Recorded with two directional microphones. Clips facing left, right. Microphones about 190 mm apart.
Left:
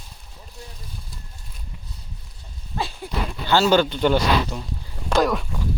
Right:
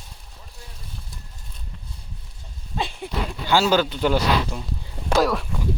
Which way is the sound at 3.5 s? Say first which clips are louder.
Left 2 dB; 10° right (ahead or behind).